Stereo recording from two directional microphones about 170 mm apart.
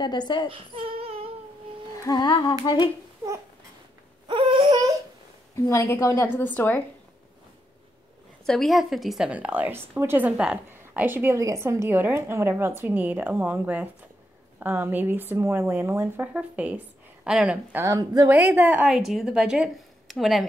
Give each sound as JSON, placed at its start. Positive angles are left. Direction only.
{"t": 0.0, "sound": "speech", "side_deg": 25}
{"t": 0.5, "sound": "a sound", "side_deg": -35}
{"t": 2.0, "sound": "speech", "side_deg": 25}
{"t": 4.3, "sound": "wail", "side_deg": -30}
{"t": 5.6, "sound": "a woman's voice", "side_deg": 15}
{"t": 8.5, "sound": "a woman's voice", "side_deg": 0}
{"t": 17.7, "sound": "a woman's voice", "side_deg": -20}